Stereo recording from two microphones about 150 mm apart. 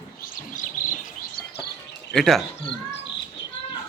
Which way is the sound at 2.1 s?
Centre (ahead or behind).